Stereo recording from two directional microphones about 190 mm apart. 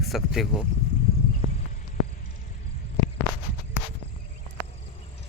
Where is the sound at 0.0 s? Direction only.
Centre (ahead or behind).